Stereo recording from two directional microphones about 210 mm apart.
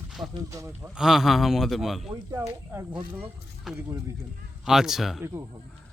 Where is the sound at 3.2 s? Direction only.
5° right (ahead or behind).